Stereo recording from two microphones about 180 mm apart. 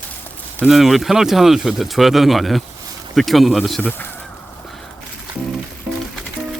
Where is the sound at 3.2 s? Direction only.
Centre (ahead or behind).